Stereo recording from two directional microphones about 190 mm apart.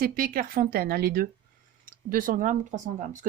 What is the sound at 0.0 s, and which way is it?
Speech, 50° right (ahead or behind).